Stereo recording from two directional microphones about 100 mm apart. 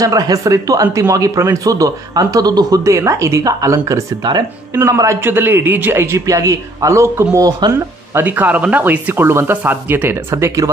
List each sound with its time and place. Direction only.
0.0 s speech: 35° right (ahead or behind)
4.2 s speech: 45° right (ahead or behind)
4.7 s speech: 30° right (ahead or behind)
8.1 s speech: 20° right (ahead or behind); by 10.7 s 35° right (ahead or behind)